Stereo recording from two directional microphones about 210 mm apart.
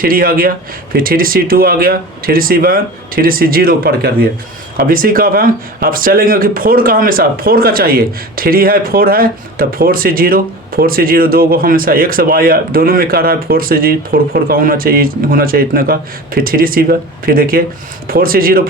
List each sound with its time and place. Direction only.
0.0 s speech: 45° right (ahead or behind)